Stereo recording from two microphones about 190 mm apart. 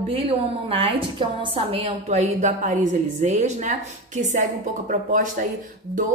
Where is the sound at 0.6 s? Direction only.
30° right (ahead or behind).